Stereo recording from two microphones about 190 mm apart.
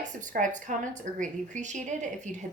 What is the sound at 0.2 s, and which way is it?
A woman's voice, 40° right (ahead or behind).